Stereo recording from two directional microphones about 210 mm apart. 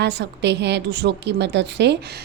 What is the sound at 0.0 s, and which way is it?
Speech, 55° right (ahead or behind).